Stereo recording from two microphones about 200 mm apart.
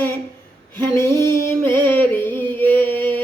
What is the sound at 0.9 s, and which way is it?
Female singing, 15° left (ahead or behind).